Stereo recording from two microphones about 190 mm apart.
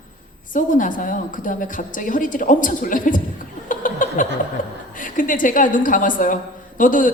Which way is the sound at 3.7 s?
45° left (ahead or behind).